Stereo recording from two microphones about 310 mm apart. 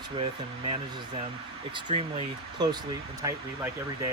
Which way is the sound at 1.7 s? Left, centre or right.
Centre.